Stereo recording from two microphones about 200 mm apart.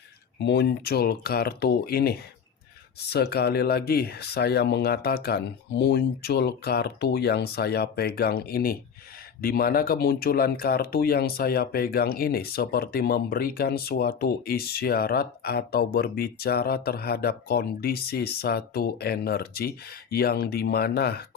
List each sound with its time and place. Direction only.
0.3 s speech: 60° left (ahead or behind)